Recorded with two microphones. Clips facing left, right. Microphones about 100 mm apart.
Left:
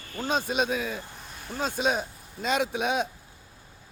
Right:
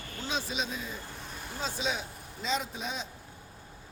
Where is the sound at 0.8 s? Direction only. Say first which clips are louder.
Left 8 dB; 80° left.